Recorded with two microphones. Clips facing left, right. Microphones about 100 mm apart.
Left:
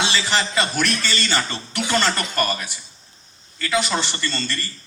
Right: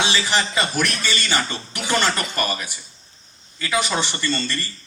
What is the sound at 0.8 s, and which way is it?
Speech, 15° right (ahead or behind).